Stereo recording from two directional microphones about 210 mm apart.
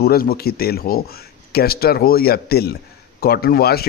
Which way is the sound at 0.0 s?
45° left (ahead or behind).